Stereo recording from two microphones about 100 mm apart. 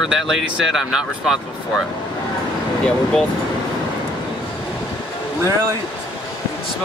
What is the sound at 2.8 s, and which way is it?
Speech, 5° left (ahead or behind).